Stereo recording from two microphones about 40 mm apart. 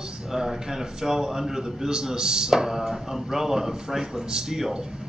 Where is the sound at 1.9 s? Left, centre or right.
Centre.